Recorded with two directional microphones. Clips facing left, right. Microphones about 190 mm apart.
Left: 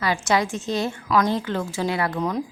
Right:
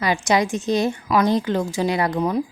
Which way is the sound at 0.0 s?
15° right (ahead or behind).